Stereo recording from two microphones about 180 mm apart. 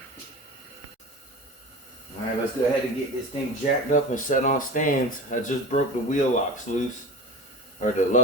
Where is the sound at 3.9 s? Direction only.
45° left (ahead or behind).